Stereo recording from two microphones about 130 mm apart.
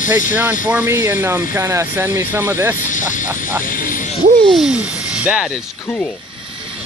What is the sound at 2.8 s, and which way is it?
Speech, 80° left.